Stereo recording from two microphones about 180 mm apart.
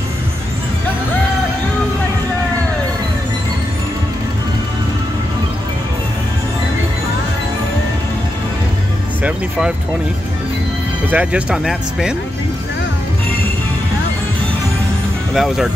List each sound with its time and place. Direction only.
9.2 s music: 5° right (ahead or behind)
11.1 s speech: 10° right (ahead or behind)
15.3 s speech: centre (ahead or behind)